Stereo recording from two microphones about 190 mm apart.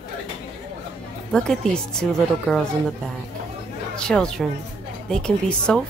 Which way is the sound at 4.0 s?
5° left (ahead or behind).